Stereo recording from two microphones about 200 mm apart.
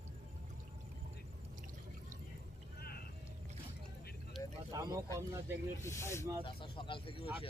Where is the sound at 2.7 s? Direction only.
50° left (ahead or behind).